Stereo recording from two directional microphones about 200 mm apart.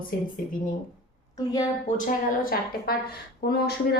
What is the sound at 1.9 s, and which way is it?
A woman's voice, 40° left (ahead or behind).